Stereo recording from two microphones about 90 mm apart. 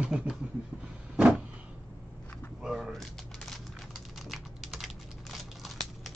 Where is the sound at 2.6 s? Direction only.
5° right (ahead or behind).